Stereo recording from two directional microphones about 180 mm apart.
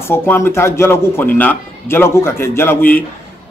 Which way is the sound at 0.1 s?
15° left (ahead or behind).